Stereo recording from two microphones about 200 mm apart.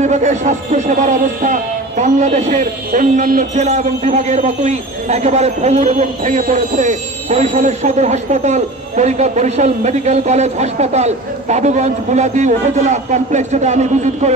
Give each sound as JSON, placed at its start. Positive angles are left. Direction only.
{"t": 0.0, "sound": "speech", "side_deg": -35}